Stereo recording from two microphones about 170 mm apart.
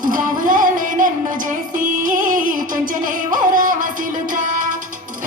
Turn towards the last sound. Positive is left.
turn(degrees=-50)  # may be behind; listen again after turning